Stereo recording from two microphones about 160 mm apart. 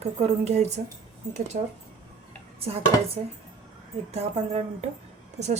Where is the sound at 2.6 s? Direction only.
40° right (ahead or behind).